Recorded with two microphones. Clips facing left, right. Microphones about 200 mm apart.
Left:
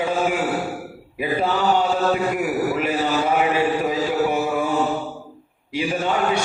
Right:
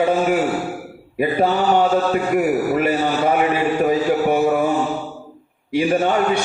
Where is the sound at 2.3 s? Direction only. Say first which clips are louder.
Right 4 dB; 50° right (ahead or behind).